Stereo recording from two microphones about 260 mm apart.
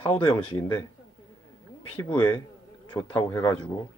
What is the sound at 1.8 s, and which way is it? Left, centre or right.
Speech, centre.